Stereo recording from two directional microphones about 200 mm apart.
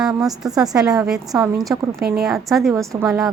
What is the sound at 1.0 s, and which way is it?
Speech, centre (ahead or behind).